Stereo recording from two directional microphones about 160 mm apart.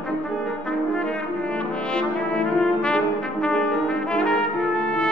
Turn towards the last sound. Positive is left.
turn(degrees=5)  # may be behind; listen again after turning